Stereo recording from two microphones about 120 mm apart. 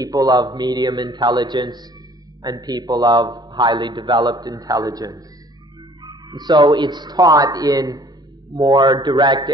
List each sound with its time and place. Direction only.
0.0 s a man's voice: 30° right (ahead or behind)